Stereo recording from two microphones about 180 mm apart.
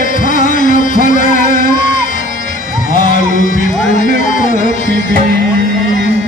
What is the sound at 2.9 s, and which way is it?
Music, 45° left (ahead or behind).